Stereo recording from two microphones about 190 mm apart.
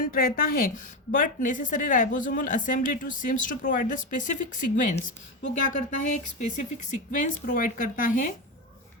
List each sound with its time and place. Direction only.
0.0 s a woman's voice: 45° left (ahead or behind)